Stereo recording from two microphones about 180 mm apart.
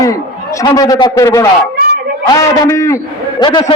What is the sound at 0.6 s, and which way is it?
A man's voice, 20° left (ahead or behind).